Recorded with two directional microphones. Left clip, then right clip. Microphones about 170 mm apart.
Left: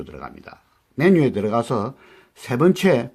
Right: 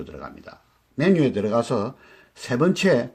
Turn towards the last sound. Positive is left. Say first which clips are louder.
# left 2 dB
turn(degrees=35)  # may be behind; listen again after turning